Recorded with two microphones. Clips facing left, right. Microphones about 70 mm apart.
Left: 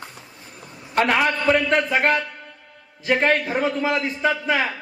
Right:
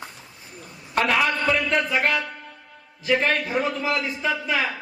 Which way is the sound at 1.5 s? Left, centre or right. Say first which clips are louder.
Left 3 dB; left.